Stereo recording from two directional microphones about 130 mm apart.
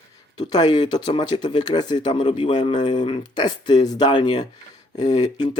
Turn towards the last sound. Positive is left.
turn(degrees=30)  # may be behind; listen again after turning